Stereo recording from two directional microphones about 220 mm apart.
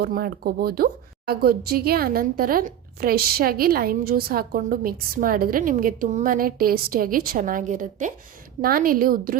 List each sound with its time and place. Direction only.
0.0 s a woman's voice: 40° right (ahead or behind)